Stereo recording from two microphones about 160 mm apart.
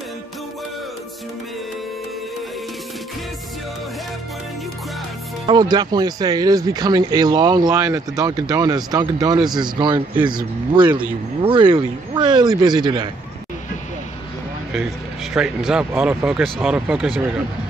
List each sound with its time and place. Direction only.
5.5 s speech: 25° right (ahead or behind)
11.4 s speech: 30° right (ahead or behind)
15.3 s speech: 5° right (ahead or behind)